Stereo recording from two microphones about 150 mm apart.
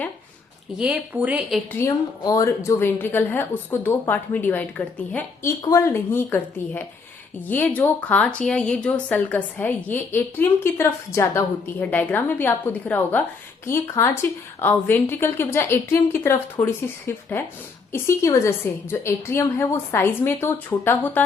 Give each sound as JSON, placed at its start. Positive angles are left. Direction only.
{"t": 0.8, "sound": "a woman's voice", "side_deg": -10}
{"t": 1.7, "sound": "a woman's voice", "side_deg": 15}
{"t": 5.6, "sound": "a woman's voice", "side_deg": 20}